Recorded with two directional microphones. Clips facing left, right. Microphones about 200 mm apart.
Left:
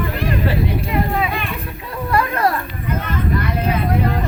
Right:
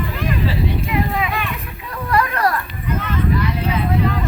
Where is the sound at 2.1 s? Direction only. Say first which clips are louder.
Even; 25° left (ahead or behind).